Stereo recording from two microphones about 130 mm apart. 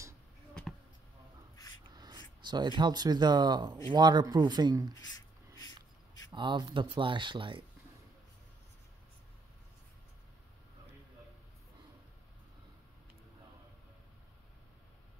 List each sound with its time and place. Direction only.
1.9 s speech: 30° right (ahead or behind)
5.0 s a sound: 30° left (ahead or behind)
6.3 s speech: 35° right (ahead or behind)